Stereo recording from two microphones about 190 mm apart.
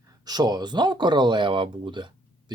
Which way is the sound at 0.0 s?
20° right (ahead or behind).